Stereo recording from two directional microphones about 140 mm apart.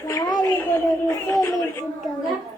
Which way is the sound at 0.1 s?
25° left (ahead or behind).